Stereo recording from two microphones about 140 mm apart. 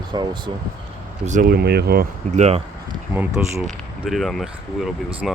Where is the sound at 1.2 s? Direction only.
70° right (ahead or behind); by 2.4 s 90° right.